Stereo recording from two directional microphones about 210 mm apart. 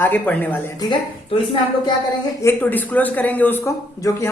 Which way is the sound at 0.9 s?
20° left (ahead or behind).